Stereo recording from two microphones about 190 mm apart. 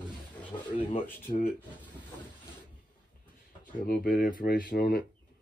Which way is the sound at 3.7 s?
50° left (ahead or behind).